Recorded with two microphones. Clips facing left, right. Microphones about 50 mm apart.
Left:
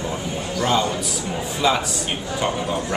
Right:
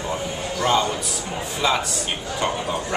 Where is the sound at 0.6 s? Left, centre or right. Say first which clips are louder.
Even; centre.